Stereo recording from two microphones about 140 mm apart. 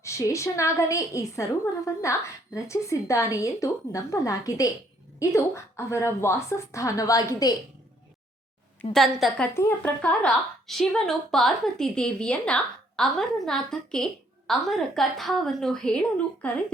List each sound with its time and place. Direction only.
0.0 s a woman's voice: 20° left (ahead or behind)
8.8 s a woman's voice: centre (ahead or behind)
9.6 s a woman's voice: 15° left (ahead or behind)